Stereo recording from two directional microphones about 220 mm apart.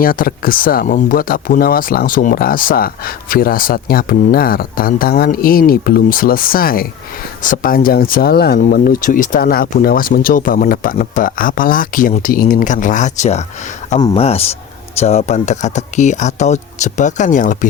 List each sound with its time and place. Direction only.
0.0 s speech: 40° left (ahead or behind)